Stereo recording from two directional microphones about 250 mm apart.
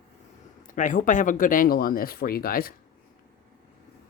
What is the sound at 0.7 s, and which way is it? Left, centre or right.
Speech, left.